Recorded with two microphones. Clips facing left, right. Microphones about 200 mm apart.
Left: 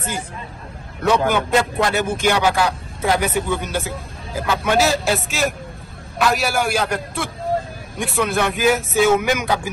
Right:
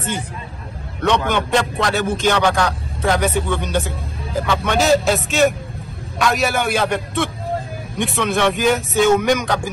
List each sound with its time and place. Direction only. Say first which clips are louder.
1.3 s speech: even; 5° left (ahead or behind)